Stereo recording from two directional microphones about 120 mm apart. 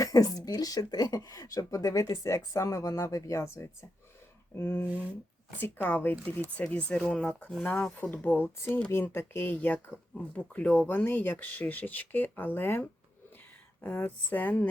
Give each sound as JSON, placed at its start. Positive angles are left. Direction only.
{"t": 0.0, "sound": "speech", "side_deg": 30}
{"t": 13.8, "sound": "speech", "side_deg": 15}